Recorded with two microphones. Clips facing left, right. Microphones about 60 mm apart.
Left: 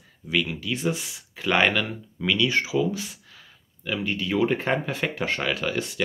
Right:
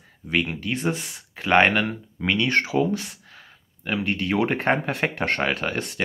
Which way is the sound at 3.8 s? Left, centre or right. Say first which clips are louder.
Right 2 dB; right.